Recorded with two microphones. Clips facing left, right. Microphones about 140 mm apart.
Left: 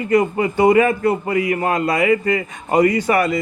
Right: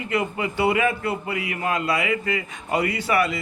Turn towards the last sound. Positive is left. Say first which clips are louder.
# left 6 dB
turn(degrees=45)  # may be behind; listen again after turning